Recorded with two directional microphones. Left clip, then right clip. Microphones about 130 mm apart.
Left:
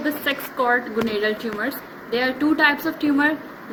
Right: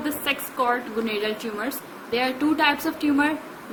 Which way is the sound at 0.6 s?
50° right (ahead or behind).